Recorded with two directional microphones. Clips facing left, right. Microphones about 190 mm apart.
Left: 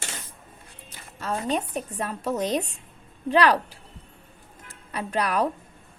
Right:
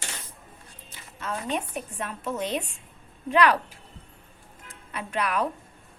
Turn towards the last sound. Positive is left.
turn(degrees=40)  # may be behind; listen again after turning